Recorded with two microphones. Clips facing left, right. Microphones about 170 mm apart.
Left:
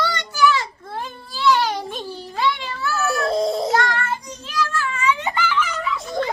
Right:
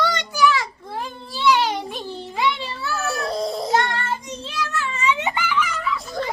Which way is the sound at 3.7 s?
25° right (ahead or behind).